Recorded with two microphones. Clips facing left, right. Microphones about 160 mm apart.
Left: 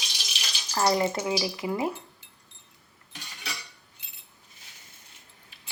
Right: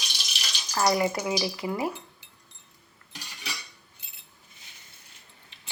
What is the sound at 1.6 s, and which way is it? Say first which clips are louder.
Speech: left 1 dB; 20° left (ahead or behind).